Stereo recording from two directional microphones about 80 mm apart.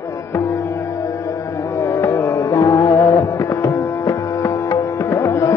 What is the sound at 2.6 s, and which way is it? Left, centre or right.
Music, left.